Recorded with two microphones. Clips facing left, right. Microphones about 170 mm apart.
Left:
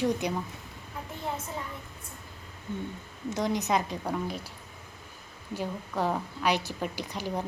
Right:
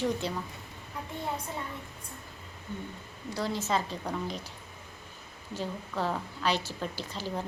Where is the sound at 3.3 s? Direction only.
20° left (ahead or behind).